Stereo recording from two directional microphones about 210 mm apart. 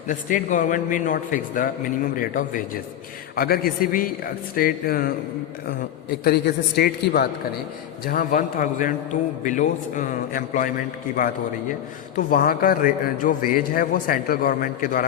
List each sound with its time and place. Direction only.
0.1 s a man's voice: 40° left (ahead or behind)
6.2 s a man's voice: 50° left (ahead or behind)